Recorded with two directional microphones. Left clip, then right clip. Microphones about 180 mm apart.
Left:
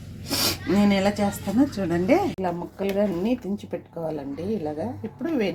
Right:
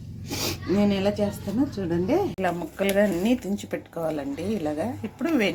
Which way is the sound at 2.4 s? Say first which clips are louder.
Right 2 dB; 5° left (ahead or behind).